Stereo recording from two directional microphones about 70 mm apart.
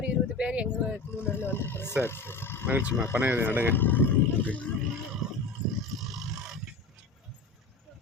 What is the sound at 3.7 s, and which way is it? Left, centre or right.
Speech, left.